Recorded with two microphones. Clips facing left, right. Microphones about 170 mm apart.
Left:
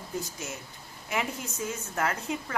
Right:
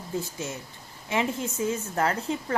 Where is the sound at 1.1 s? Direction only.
30° right (ahead or behind).